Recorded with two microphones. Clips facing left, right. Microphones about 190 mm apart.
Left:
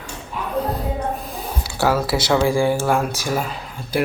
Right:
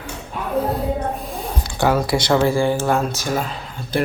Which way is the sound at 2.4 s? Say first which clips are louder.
Even; 10° left (ahead or behind).